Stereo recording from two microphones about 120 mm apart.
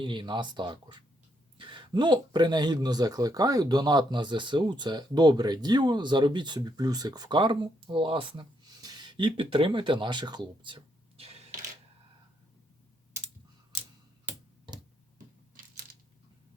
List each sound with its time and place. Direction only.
0.0 s speech: 40° right (ahead or behind)
8.8 s speech: 35° right (ahead or behind)